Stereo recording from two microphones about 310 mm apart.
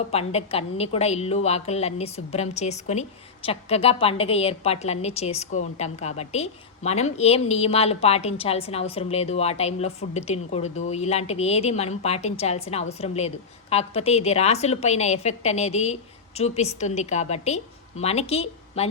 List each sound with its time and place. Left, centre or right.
0.1 s a woman's voice: centre